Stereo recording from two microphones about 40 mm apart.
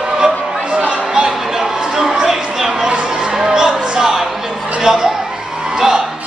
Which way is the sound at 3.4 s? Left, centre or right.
Centre.